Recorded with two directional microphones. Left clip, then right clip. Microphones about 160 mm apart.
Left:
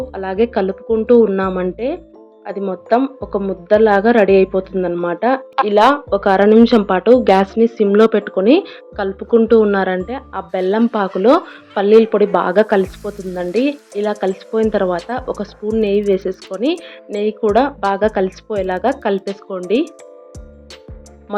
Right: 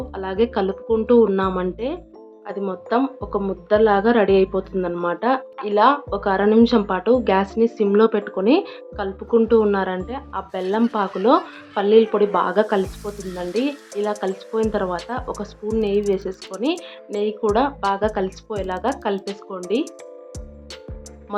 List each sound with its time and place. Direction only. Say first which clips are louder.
0.1 s speech: left 3 dB; 15° left (ahead or behind)
5.6 s speech: left 4 dB; 35° left (ahead or behind)
17.5 s speech: left 5 dB; 20° left (ahead or behind)